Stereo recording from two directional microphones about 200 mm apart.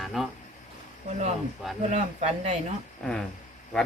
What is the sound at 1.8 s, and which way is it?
Speech, 35° right (ahead or behind).